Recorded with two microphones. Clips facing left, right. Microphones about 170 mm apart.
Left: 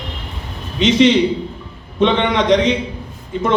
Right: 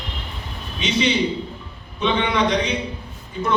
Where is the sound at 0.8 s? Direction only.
90° left.